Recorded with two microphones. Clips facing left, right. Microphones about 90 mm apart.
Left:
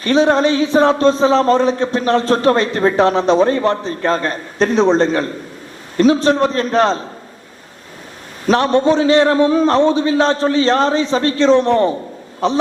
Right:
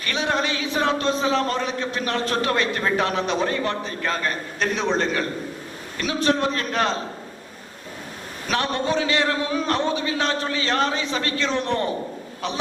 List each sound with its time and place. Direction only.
0.0 s a man's voice: 35° left (ahead or behind)
8.4 s a man's voice: 35° left (ahead or behind)